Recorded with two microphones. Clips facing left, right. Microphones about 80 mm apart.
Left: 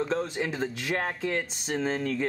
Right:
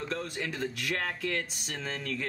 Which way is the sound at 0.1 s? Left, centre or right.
Left.